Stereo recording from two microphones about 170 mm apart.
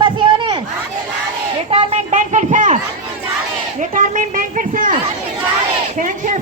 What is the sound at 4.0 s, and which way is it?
Speech, 50° right (ahead or behind).